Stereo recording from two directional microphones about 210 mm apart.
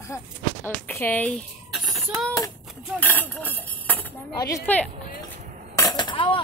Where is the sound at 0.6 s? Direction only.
10° left (ahead or behind).